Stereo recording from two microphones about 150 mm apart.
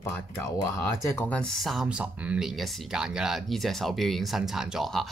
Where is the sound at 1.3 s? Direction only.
5° left (ahead or behind).